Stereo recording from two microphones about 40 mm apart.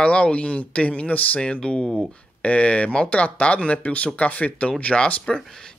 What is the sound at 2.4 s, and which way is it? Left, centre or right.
Speech, left.